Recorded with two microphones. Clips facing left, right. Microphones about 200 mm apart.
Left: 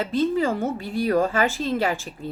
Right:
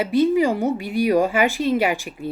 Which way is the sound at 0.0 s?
10° right (ahead or behind).